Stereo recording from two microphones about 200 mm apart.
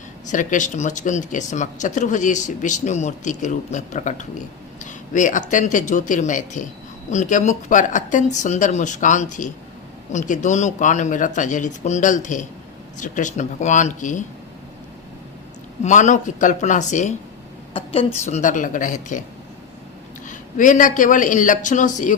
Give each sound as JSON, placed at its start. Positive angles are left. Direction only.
{"t": 0.3, "sound": "speech", "side_deg": 40}
{"t": 15.8, "sound": "speech", "side_deg": 35}
{"t": 20.2, "sound": "speech", "side_deg": 40}